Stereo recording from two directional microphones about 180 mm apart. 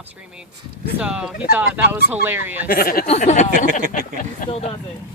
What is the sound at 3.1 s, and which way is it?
Speech, 40° left (ahead or behind).